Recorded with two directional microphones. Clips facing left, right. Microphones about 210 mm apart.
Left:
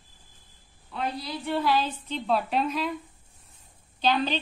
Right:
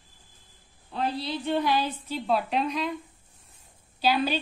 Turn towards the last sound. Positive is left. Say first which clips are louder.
# even
turn(degrees=-10)  # may be behind; listen again after turning